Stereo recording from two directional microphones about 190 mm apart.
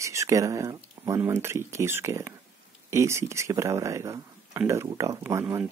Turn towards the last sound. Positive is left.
turn(degrees=-15)  # may be behind; listen again after turning